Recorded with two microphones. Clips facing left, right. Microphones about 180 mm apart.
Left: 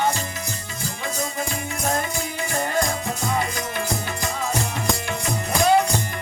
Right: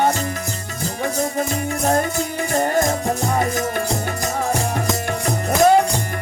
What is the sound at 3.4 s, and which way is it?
Music, 45° right (ahead or behind).